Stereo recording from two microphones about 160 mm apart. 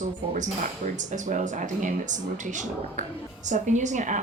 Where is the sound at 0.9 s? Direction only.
50° right (ahead or behind).